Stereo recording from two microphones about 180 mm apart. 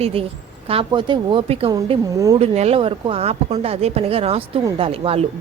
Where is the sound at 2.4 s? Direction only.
35° right (ahead or behind).